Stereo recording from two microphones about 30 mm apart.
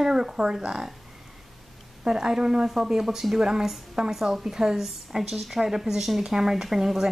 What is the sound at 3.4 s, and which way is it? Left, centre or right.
A woman's voice, right.